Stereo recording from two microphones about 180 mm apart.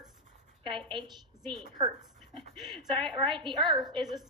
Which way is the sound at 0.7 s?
25° right (ahead or behind).